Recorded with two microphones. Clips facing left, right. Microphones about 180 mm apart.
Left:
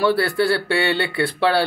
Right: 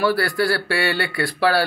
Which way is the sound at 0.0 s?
25° left (ahead or behind).